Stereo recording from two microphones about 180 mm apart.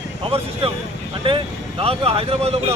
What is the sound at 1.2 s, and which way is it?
Speech, 30° right (ahead or behind).